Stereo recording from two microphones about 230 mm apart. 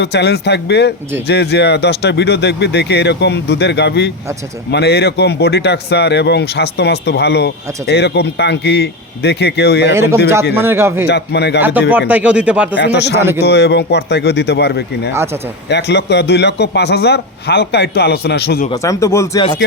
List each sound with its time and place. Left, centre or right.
0.0 s speech: left
9.9 s speech: centre
11.1 s speech: left
11.6 s speech: centre
12.7 s speech: left
13.1 s speech: centre
13.4 s speech: left
18.7 s speech: centre